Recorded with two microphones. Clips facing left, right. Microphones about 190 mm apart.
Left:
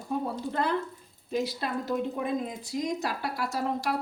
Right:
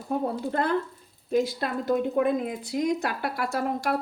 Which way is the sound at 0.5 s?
50° right (ahead or behind).